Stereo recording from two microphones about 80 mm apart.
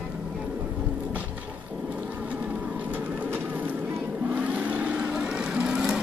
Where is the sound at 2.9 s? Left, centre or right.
Right.